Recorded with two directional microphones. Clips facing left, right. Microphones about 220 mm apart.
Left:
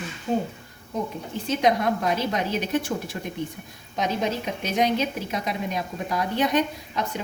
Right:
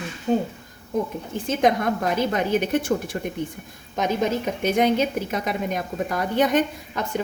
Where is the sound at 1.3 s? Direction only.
50° right (ahead or behind).